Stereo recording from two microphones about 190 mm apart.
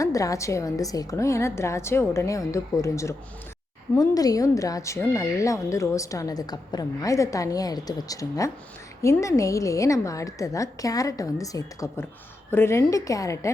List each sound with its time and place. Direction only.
0.0 s speech: 15° left (ahead or behind)